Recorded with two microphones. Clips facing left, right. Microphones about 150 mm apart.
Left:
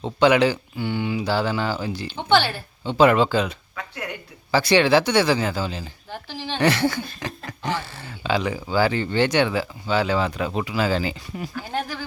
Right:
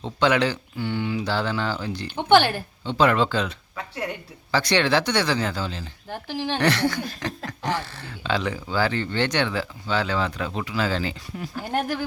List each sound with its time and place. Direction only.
0.0 s speech: 10° left (ahead or behind)
2.0 s speech: 15° right (ahead or behind)
2.8 s speech: 10° left (ahead or behind)
3.8 s a woman's voice: 30° right (ahead or behind)
4.5 s speech: 5° left (ahead or behind)
6.1 s speech: 15° right (ahead or behind)
6.6 s speech: 5° left (ahead or behind)